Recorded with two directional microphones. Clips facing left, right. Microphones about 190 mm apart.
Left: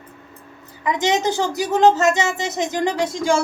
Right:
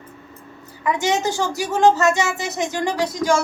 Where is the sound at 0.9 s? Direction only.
20° left (ahead or behind).